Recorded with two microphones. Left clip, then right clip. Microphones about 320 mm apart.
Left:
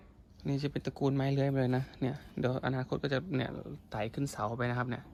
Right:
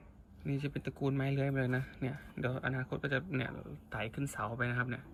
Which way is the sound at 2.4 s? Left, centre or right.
Centre.